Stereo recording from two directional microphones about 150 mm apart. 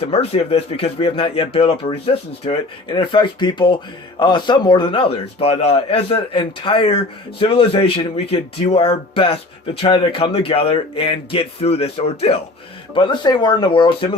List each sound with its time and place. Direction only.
0.0 s a man's voice: 40° left (ahead or behind)
2.9 s a man's voice: 30° left (ahead or behind)